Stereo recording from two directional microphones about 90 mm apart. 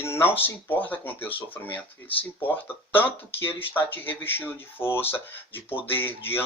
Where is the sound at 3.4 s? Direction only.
25° left (ahead or behind).